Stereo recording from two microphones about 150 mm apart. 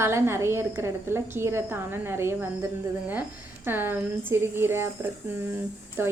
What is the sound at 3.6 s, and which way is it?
A woman's voice, 15° right (ahead or behind).